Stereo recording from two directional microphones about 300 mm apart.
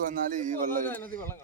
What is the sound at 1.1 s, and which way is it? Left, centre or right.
Speech, centre.